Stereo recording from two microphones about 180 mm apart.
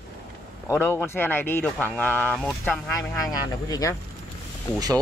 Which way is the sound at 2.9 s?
20° left (ahead or behind).